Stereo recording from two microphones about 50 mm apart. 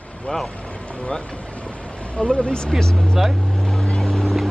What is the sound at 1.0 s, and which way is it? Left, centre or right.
Speech, centre.